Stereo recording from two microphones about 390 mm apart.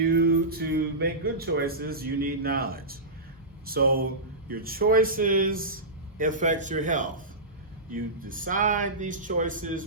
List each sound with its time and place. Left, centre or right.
0.0 s speech: right